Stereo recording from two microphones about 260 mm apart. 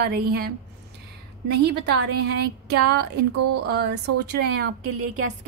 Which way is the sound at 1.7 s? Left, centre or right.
Right.